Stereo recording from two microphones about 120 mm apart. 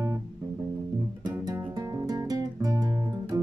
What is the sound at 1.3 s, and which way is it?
Music, 25° right (ahead or behind).